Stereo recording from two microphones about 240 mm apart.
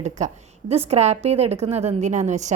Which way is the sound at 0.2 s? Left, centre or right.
Right.